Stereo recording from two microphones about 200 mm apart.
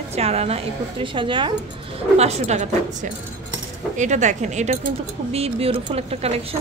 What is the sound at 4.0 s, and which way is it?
Speech, 35° right (ahead or behind).